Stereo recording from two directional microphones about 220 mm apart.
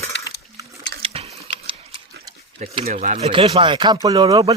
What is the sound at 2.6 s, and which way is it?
Speech, 35° right (ahead or behind).